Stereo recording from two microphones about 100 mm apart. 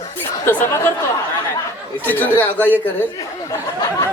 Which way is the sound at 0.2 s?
25° left (ahead or behind).